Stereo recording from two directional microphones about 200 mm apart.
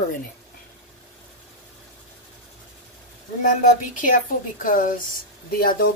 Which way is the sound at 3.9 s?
40° left (ahead or behind).